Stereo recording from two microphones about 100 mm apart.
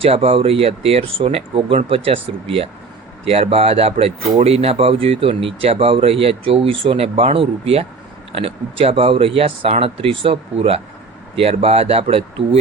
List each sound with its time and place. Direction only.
0.0 s speech: 75° right (ahead or behind)
3.2 s speech: 85° right